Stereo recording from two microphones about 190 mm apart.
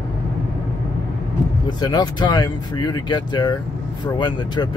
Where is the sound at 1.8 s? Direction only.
20° left (ahead or behind).